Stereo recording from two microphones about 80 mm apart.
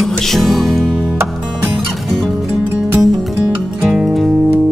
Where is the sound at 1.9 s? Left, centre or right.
Centre.